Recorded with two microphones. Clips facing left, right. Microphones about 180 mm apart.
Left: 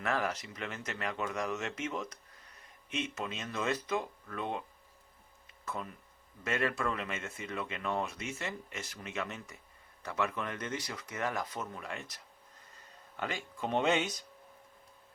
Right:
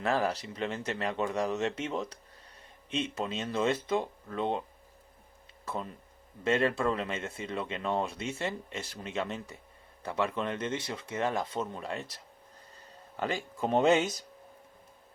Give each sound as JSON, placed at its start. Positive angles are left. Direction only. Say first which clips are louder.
{"t": 0.0, "sound": "speech", "louder": "right 4 dB", "side_deg": -30}
{"t": 5.6, "sound": "speech", "louder": "right 3 dB", "side_deg": -30}